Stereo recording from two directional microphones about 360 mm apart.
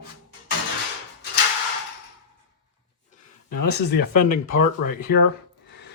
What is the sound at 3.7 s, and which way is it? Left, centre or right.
Speech, left.